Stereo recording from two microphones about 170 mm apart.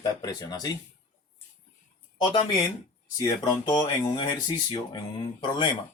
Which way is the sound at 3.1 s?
25° left (ahead or behind).